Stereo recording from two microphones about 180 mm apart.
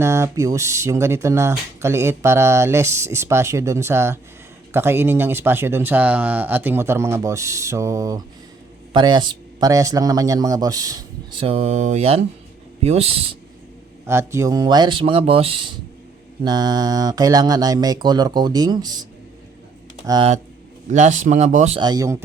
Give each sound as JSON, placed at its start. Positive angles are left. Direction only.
{"t": 0.0, "sound": "a man's voice", "side_deg": -15}
{"t": 14.1, "sound": "a man's voice", "side_deg": -15}
{"t": 20.9, "sound": "speech", "side_deg": -40}
{"t": 21.8, "sound": "a man's voice", "side_deg": -20}